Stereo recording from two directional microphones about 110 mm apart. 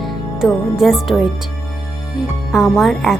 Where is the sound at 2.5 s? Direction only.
5° right (ahead or behind).